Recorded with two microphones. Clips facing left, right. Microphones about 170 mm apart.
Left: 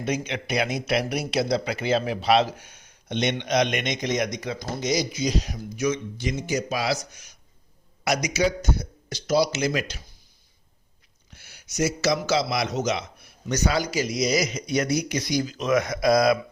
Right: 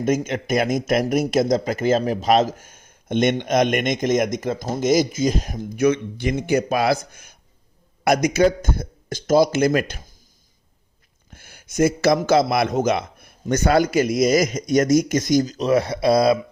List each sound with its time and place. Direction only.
0.0 s speech: 45° right (ahead or behind)
11.3 s speech: 50° right (ahead or behind); by 16.4 s 30° right (ahead or behind)